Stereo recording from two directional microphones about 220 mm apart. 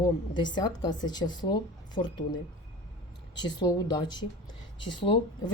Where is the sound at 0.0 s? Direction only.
20° left (ahead or behind).